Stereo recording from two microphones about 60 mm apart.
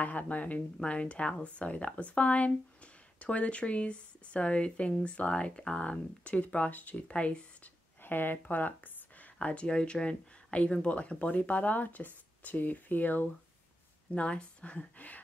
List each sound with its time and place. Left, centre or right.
0.0 s speech: left
8.0 s speech: left
14.1 s speech: centre